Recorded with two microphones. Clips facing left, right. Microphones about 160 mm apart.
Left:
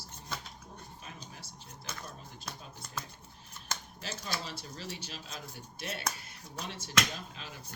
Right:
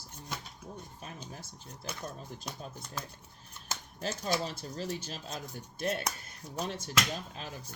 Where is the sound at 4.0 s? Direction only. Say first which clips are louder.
Right 9 dB; 45° right (ahead or behind).